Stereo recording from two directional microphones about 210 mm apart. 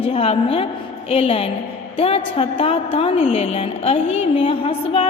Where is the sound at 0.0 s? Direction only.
25° left (ahead or behind).